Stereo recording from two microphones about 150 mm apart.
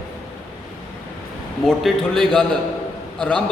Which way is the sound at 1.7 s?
5° left (ahead or behind).